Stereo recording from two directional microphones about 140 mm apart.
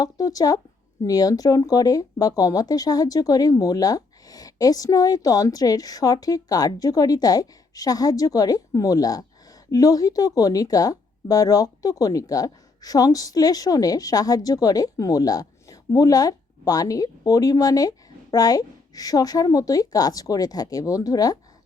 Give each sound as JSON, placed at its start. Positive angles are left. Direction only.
{"t": 0.0, "sound": "speech", "side_deg": 25}